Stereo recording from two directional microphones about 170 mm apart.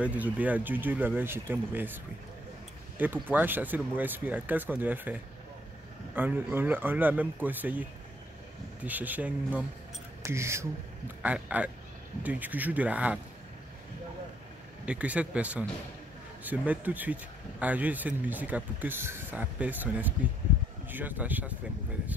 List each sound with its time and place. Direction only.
0.0 s speech: 10° right (ahead or behind)
3.0 s speech: 10° right (ahead or behind)
8.8 s speech: 10° right (ahead or behind)
14.9 s speech: 10° right (ahead or behind)